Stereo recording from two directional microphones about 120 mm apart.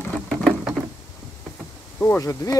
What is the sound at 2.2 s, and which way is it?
Speech, 25° left (ahead or behind).